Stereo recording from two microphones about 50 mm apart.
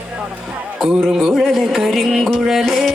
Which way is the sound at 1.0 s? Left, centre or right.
Centre.